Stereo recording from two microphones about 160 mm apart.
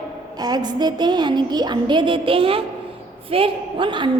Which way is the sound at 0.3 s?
25° right (ahead or behind).